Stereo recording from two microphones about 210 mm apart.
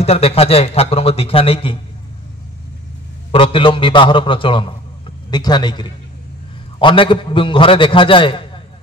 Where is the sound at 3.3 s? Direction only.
25° left (ahead or behind).